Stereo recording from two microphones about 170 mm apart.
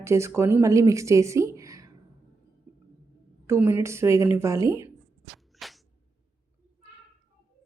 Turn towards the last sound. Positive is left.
turn(degrees=0)  # may be behind; listen again after turning